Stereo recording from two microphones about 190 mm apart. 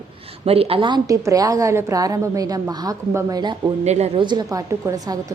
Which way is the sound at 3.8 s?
35° right (ahead or behind).